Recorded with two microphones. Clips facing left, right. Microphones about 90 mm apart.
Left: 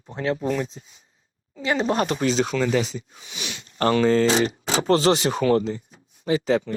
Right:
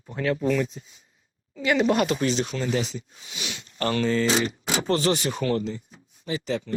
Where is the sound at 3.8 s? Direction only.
40° left (ahead or behind).